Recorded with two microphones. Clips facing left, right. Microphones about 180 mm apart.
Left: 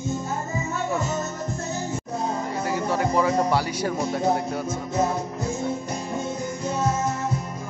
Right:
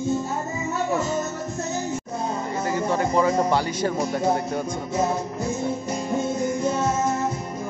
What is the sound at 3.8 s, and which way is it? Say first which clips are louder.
Speech: right 1 dB; 5° left (ahead or behind).